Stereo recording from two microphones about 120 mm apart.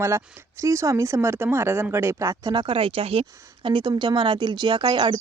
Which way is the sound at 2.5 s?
45° right (ahead or behind).